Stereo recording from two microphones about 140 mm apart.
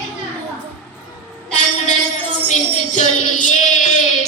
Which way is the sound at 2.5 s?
60° left (ahead or behind).